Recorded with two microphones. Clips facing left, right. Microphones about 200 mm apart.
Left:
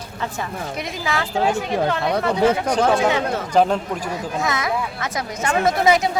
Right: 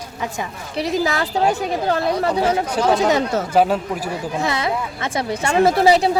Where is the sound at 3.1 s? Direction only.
40° right (ahead or behind).